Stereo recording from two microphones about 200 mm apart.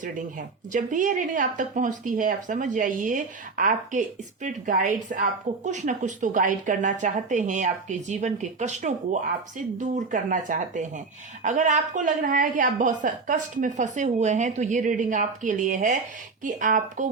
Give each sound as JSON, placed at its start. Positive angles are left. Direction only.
{"t": 0.0, "sound": "a woman's voice", "side_deg": -40}